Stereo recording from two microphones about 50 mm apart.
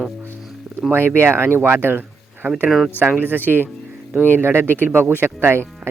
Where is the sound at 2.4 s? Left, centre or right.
Right.